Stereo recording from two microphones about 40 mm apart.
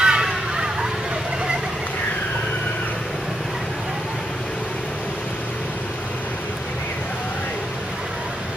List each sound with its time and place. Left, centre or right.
0.0 s vehicle: centre